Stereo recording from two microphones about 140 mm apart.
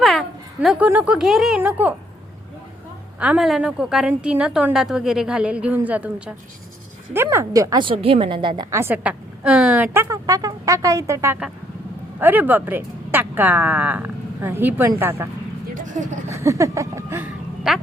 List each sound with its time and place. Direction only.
0.0 s a sound: centre (ahead or behind)
0.9 s a woman's voice: 10° right (ahead or behind)
3.2 s a woman's voice: 5° right (ahead or behind); by 7.8 s 25° right (ahead or behind)
7.8 s a woman's voice: 40° right (ahead or behind)
8.7 s a woman's voice: 15° right (ahead or behind)
9.9 s speech: 20° right (ahead or behind)
15.7 s vehicle: 65° right (ahead or behind)
16.3 s speech: 20° right (ahead or behind)